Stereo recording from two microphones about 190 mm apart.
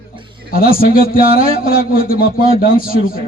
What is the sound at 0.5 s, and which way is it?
A man's voice, 50° left (ahead or behind).